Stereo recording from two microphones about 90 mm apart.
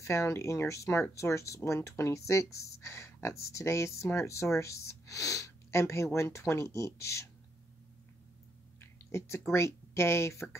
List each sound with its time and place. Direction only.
0.0 s speech: 30° left (ahead or behind)
8.8 s a sound: 30° left (ahead or behind)
9.5 s speech: 30° left (ahead or behind)